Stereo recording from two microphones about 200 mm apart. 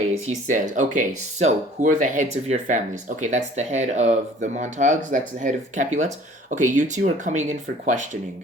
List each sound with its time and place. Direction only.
0.4 s speech: 40° right (ahead or behind)